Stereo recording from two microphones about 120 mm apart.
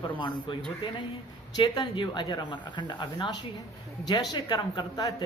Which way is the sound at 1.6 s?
40° left (ahead or behind).